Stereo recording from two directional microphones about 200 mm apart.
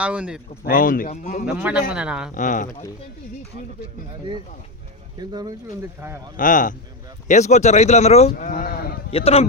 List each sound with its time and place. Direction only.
0.0 s speech: 5° right (ahead or behind)
0.6 s speech: 45° left (ahead or behind)
1.5 s a man's voice: 5° right (ahead or behind)
2.3 s speech: 40° left (ahead or behind)
5.3 s speech: 20° right (ahead or behind)
6.3 s speech: 40° left (ahead or behind)
8.3 s speech: 45° left (ahead or behind)
9.0 s a man's voice: 30° left (ahead or behind)